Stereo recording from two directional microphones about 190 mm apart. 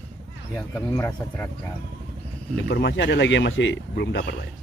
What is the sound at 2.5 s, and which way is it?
Speech, 65° left (ahead or behind).